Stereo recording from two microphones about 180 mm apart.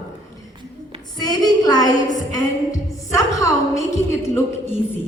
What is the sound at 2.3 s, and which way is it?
A woman's voice, 15° left (ahead or behind).